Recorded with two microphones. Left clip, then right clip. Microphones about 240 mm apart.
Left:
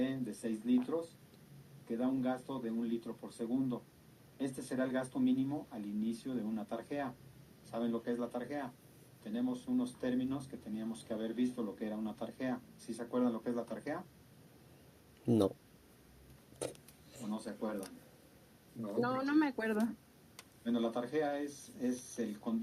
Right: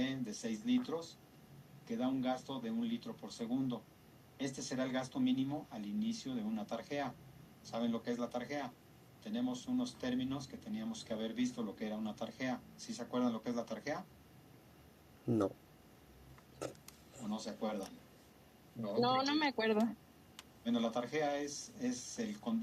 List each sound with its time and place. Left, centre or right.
0.0 s speech: right
15.3 s speech: left
17.2 s speech: right